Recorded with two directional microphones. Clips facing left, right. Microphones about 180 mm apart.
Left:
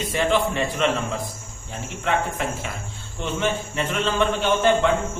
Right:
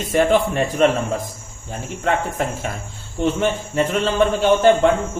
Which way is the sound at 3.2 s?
40° right (ahead or behind).